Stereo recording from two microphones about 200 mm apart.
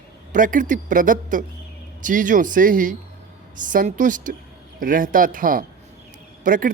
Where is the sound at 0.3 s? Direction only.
40° right (ahead or behind).